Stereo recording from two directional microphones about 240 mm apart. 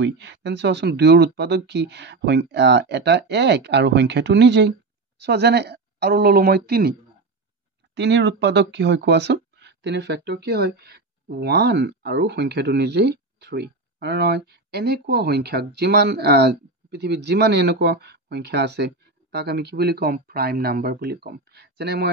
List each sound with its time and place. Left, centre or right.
0.0 s speech: right